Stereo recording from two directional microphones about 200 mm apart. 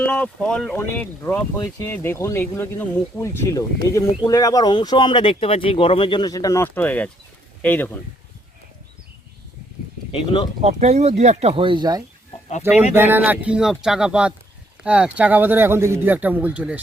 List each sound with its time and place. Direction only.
0.0 s speech: 5° left (ahead or behind)
10.1 s speech: 25° left (ahead or behind)
10.6 s speech: 35° right (ahead or behind)
12.6 s a man's voice: 10° right (ahead or behind)